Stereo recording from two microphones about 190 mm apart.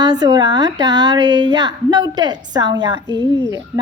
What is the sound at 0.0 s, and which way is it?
A woman's voice, 20° right (ahead or behind).